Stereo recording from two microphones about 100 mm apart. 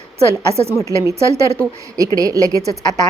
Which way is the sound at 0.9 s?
30° right (ahead or behind).